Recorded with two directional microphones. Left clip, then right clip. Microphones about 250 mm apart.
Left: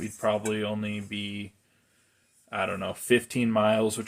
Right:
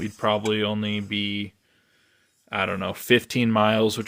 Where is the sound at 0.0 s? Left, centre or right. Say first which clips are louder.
Right 4 dB; right.